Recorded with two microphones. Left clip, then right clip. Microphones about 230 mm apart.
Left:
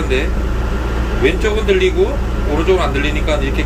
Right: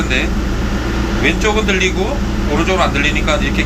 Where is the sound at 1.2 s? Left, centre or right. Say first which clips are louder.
Even; centre.